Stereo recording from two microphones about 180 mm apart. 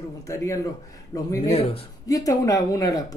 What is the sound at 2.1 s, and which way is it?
Speech, 20° left (ahead or behind).